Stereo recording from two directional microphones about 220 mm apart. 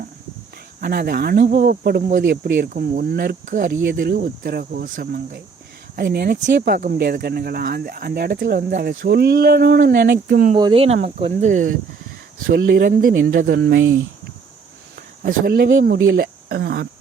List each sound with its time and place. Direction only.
0.8 s speech: 45° right (ahead or behind)
10.5 s speech: 25° right (ahead or behind); by 13.9 s 55° right (ahead or behind)
15.2 s speech: 40° right (ahead or behind)